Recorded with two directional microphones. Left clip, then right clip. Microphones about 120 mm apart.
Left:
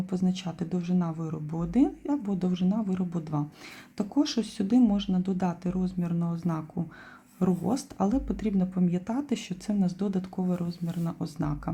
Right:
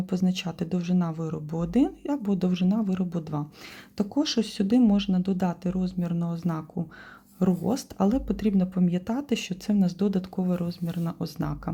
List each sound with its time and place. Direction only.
0.0 s speech: 20° right (ahead or behind)